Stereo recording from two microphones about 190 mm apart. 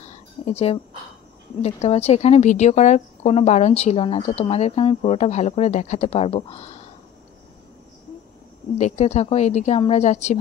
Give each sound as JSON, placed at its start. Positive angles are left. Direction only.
{"t": 0.1, "sound": "a sound", "side_deg": 35}
{"t": 1.6, "sound": "speech", "side_deg": 35}
{"t": 8.7, "sound": "speech", "side_deg": 35}